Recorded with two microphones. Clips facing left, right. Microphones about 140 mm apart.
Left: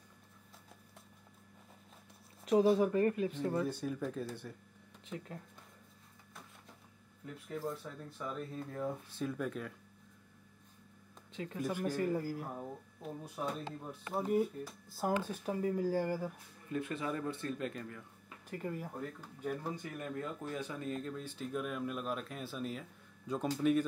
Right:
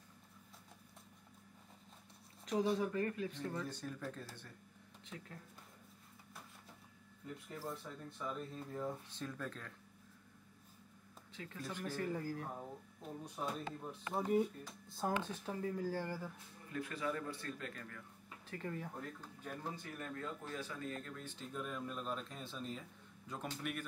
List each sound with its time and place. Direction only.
2.4 s speech: 25° left (ahead or behind); by 4.3 s 10° left (ahead or behind)
7.5 s speech: centre (ahead or behind)
11.3 s speech: 20° left (ahead or behind)